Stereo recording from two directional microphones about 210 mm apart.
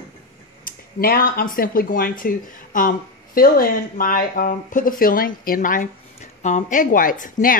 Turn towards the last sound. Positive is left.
turn(degrees=40)  # may be behind; listen again after turning